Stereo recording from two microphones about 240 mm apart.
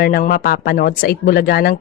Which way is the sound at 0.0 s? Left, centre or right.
Left.